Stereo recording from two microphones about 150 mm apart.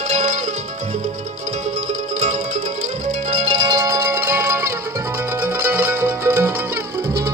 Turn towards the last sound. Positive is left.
turn(degrees=-20)  # may be behind; listen again after turning